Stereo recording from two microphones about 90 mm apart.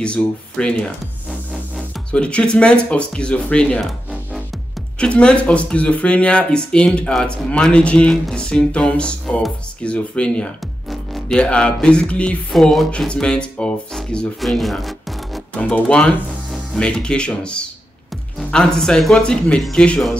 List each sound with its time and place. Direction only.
0.0 s speech: 10° left (ahead or behind)
4.9 s speech: 10° left (ahead or behind)
14.4 s music: centre (ahead or behind)
15.5 s speech: 15° left (ahead or behind)